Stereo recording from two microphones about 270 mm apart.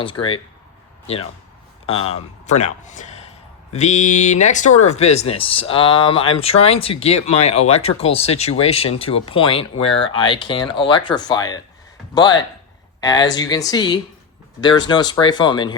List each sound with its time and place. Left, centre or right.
0.0 s speech: centre
1.9 s a man's voice: left
13.0 s speech: centre